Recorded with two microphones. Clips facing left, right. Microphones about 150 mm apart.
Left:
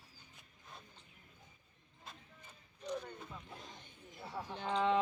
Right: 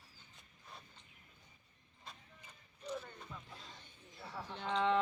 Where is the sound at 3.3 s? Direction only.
20° left (ahead or behind).